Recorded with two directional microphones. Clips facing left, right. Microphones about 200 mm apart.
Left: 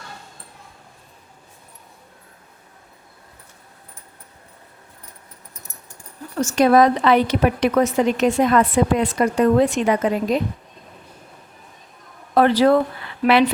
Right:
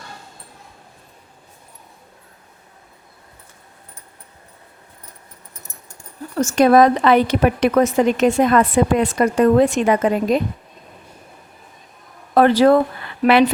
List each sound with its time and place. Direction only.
6.4 s a woman's voice: 50° right (ahead or behind)
12.3 s speech: 50° right (ahead or behind)